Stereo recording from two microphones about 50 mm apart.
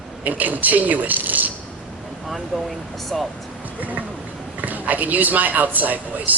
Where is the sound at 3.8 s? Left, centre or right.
Right.